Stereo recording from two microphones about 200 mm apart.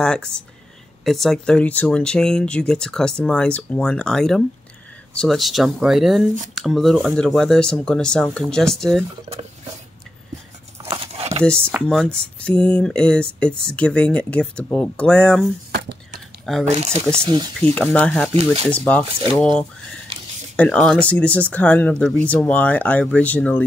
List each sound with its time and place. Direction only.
0.0 s speech: 5° left (ahead or behind)
10.8 s crumpling: 30° right (ahead or behind)
11.9 s speech: centre (ahead or behind)
16.6 s speech: 35° right (ahead or behind)
17.2 s speech: 20° right (ahead or behind)
17.7 s speech: 5° left (ahead or behind)
18.3 s speech: 30° right (ahead or behind)
18.7 s speech: 5° left (ahead or behind)